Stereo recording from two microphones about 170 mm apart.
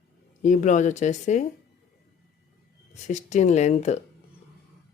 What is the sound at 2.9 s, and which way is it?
Speech, 45° left (ahead or behind).